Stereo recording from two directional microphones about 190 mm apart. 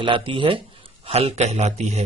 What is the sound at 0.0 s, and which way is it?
Speech, 25° right (ahead or behind).